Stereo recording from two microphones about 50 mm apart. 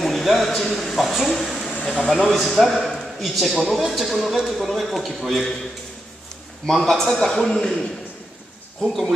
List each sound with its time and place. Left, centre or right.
0.0 s a man's voice: centre
1.6 s a sound: left
2.1 s a man's voice: centre
6.6 s a man's voice: centre
8.8 s a man's voice: centre